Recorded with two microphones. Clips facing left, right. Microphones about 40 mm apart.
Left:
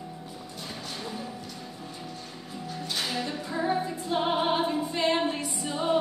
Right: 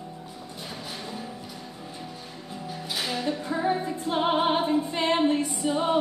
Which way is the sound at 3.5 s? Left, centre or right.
Right.